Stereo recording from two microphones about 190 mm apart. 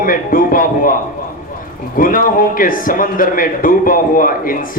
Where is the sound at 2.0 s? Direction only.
45° left (ahead or behind).